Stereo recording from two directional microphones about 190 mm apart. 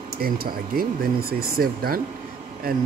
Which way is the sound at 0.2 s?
50° right (ahead or behind).